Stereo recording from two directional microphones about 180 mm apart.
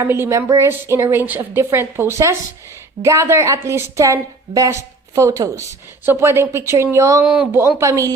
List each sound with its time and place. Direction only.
0.0 s a woman's voice: 15° right (ahead or behind)